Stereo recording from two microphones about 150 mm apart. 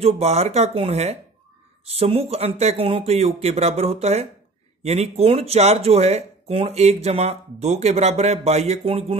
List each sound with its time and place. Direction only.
0.0 s speech: 45° right (ahead or behind)